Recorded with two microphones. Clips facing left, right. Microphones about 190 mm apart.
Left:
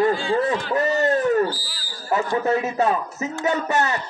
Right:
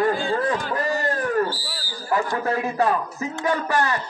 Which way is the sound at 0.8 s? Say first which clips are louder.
Left 4 dB; 25° left (ahead or behind).